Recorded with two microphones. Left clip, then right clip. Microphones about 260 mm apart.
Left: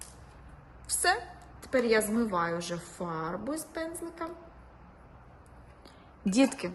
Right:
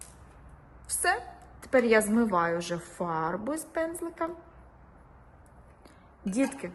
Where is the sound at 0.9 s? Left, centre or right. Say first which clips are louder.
Even; centre.